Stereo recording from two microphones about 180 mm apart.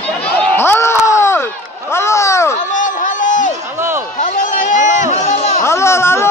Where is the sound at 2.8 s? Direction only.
45° left (ahead or behind).